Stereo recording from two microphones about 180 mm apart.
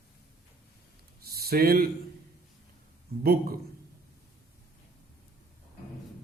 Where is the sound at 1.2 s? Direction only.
60° right (ahead or behind).